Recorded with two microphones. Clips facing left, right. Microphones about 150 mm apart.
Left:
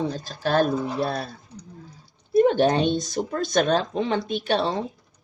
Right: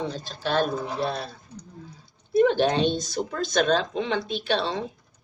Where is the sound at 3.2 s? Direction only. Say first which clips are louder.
Left 1 dB; 50° left (ahead or behind).